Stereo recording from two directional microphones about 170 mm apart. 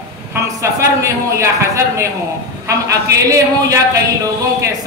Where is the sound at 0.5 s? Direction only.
20° right (ahead or behind).